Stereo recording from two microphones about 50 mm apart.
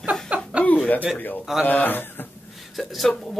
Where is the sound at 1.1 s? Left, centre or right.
Left.